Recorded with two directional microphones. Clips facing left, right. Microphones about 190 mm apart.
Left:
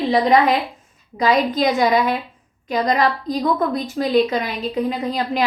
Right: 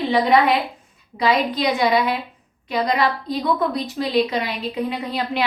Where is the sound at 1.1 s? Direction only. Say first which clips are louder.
Left 2 dB; 45° left (ahead or behind).